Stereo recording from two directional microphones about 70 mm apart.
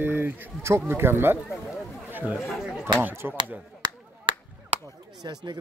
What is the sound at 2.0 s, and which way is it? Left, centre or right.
Chatter, right.